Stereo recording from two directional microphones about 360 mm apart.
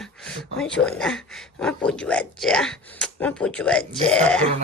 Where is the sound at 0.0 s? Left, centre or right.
Centre.